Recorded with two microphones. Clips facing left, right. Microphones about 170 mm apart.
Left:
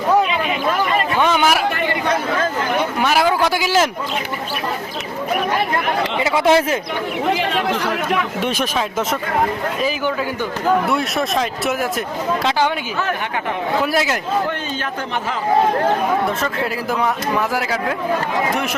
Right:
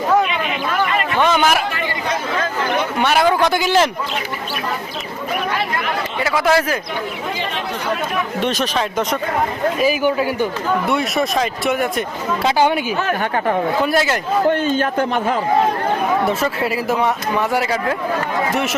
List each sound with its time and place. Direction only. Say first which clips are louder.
1.2 s a man's voice: right 2 dB; 10° left (ahead or behind)
3.0 s a man's voice: right 2 dB; 5° left (ahead or behind)
6.1 s speech: left 1 dB; 20° left (ahead or behind)
7.3 s speech: left 5 dB; 80° left
8.4 s a man's voice: right 1 dB; 10° left (ahead or behind)
10.8 s speech: right 1 dB; centre (ahead or behind)
12.5 s speech: right 4 dB; 10° right (ahead or behind)
13.8 s speech: right 2 dB; 5° left (ahead or behind)
14.7 s a man's voice: right 7 dB; 50° right (ahead or behind)
16.4 s speech: right 2 dB; 5° right (ahead or behind)